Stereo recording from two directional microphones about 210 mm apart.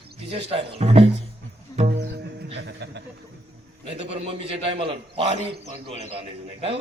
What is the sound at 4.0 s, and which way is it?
A man's voice, 30° right (ahead or behind).